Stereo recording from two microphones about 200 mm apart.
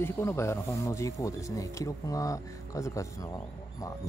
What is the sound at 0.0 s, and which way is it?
Speech, 15° left (ahead or behind).